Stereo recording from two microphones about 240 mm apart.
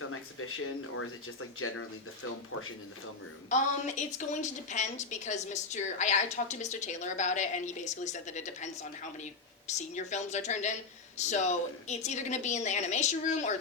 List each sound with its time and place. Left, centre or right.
0.1 s speech: left
3.5 s a woman's voice: left